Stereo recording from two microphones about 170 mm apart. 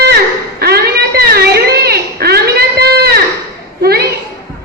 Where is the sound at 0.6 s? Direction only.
70° right (ahead or behind).